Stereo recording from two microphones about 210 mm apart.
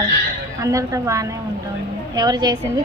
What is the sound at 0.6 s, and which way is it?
A woman's voice, 15° right (ahead or behind).